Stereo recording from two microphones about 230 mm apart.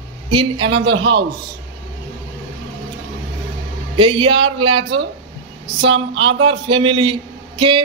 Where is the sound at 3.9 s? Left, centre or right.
Right.